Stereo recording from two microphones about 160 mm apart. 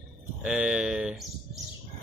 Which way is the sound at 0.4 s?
5° right (ahead or behind).